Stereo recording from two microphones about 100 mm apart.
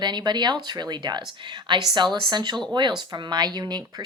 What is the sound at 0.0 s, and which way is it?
Speech, 45° right (ahead or behind).